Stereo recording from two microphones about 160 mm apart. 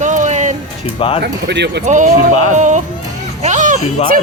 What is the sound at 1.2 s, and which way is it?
Speech, 90° right.